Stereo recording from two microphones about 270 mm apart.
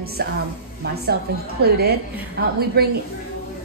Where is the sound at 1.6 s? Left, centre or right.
Right.